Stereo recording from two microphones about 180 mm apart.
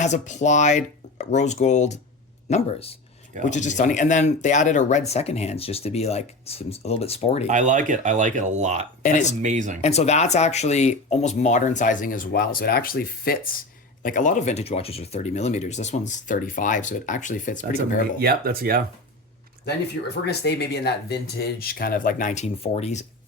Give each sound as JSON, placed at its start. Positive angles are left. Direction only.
{"t": 0.0, "sound": "speech", "side_deg": 40}
{"t": 7.4, "sound": "speech", "side_deg": -40}
{"t": 9.8, "sound": "speech", "side_deg": 35}
{"t": 18.2, "sound": "speech", "side_deg": -60}
{"t": 20.2, "sound": "speech", "side_deg": 65}